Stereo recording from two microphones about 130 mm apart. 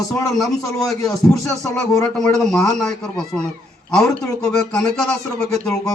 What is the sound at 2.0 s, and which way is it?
Speech, 5° left (ahead or behind).